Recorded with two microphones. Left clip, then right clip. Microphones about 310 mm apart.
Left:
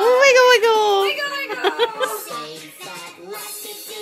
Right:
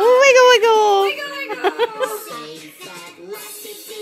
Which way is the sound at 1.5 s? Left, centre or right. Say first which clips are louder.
Right 2 dB; centre.